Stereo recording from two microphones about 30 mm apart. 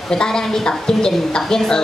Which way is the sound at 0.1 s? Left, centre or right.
Left.